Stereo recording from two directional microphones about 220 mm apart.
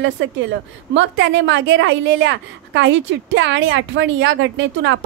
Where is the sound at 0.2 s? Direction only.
60° right (ahead or behind).